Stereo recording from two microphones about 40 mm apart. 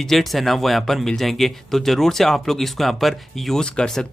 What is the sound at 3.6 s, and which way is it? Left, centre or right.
Speech, centre.